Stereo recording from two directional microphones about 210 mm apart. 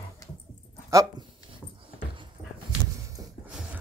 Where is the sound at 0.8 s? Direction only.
20° right (ahead or behind).